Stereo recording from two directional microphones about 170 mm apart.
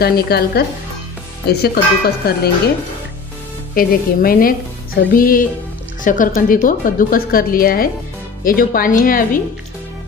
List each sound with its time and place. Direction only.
0.0 s speech: 65° left (ahead or behind)
3.7 s a woman's voice: 60° left (ahead or behind)